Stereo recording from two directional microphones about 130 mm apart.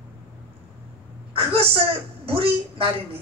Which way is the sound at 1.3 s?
50° right (ahead or behind).